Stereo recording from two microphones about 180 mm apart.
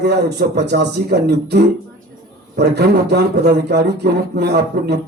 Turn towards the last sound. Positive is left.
turn(degrees=-65)  # may be behind; listen again after turning